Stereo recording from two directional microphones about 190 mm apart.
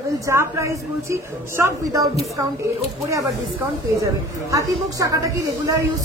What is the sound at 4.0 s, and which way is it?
A woman's voice, 15° right (ahead or behind).